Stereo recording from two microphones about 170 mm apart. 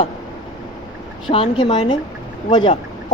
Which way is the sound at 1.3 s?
30° left (ahead or behind).